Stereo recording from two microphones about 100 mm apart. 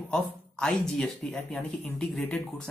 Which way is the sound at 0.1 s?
10° left (ahead or behind).